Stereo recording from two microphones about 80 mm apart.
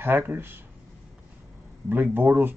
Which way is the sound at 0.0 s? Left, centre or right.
Right.